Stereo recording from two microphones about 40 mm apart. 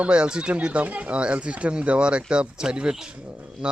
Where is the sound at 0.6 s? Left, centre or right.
Right.